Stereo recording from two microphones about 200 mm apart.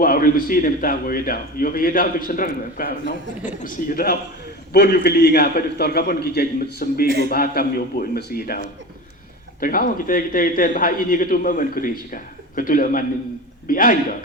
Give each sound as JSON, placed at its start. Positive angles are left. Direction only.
{"t": 0.0, "sound": "a man's voice", "side_deg": 45}